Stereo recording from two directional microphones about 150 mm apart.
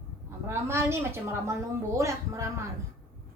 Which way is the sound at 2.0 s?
20° right (ahead or behind).